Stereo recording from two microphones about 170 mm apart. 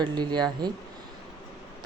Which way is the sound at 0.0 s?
25° right (ahead or behind).